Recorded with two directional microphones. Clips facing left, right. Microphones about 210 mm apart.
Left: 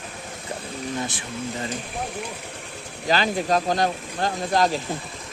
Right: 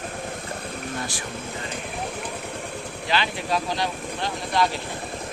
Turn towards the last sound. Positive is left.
turn(degrees=45)  # may be behind; listen again after turning